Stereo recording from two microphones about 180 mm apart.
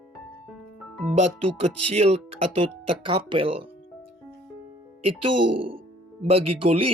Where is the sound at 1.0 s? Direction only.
35° right (ahead or behind).